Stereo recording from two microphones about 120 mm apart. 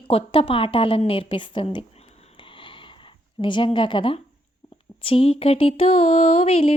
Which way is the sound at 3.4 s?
40° left (ahead or behind).